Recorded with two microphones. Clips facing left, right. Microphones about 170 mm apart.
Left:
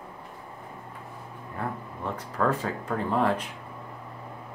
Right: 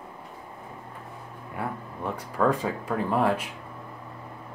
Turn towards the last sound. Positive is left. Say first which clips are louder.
# right 1 dB
turn(degrees=-10)  # may be behind; listen again after turning